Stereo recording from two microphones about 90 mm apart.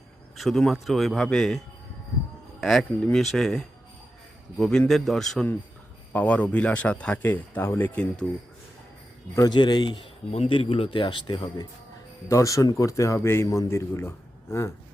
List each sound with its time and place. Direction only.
0.3 s a man's voice: 5° left (ahead or behind)
6.1 s speech: 15° left (ahead or behind)
9.5 s a man's voice: 50° left (ahead or behind)
10.5 s speech: 85° left; by 11.6 s 65° left (ahead or behind)
12.3 s a man's voice: 35° left (ahead or behind)